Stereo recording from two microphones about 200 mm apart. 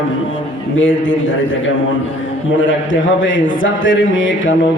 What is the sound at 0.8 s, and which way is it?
Speech, 70° left (ahead or behind).